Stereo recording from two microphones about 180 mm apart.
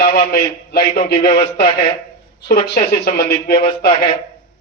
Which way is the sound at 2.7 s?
60° left (ahead or behind).